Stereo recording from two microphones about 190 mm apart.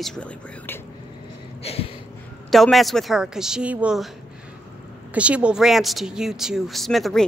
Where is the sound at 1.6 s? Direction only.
30° left (ahead or behind).